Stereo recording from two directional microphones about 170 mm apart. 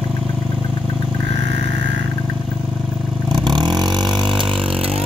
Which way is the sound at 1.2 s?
90° right.